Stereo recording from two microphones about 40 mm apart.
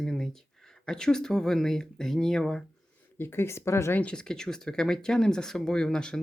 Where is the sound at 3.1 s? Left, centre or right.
Left.